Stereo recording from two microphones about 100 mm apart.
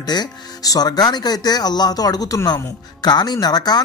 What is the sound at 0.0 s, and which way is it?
Speech, 45° left (ahead or behind).